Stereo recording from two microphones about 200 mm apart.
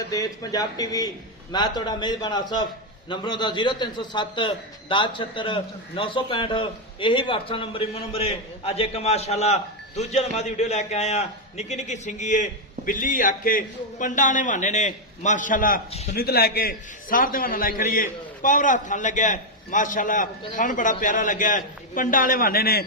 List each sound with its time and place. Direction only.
0.1 s a man's voice: 15° left (ahead or behind); by 15.8 s 40° left (ahead or behind)
15.9 s a man's voice: 30° left (ahead or behind)
16.1 s a man's voice: 50° left (ahead or behind)